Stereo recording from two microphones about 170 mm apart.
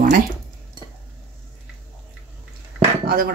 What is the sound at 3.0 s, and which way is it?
Speech, 65° right (ahead or behind).